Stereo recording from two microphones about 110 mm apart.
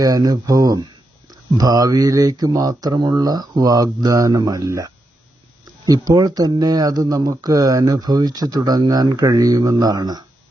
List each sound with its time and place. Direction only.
0.0 s speech: 35° right (ahead or behind)